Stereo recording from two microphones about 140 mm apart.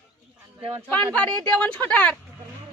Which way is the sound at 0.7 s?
15° right (ahead or behind).